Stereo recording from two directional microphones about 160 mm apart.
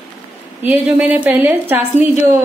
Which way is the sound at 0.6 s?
5° right (ahead or behind).